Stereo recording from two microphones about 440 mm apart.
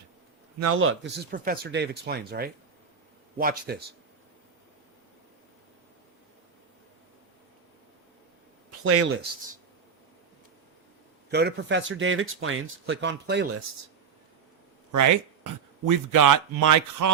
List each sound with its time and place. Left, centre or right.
0.6 s speech: right
8.8 s speech: right
11.3 s speech: right
15.9 s speech: right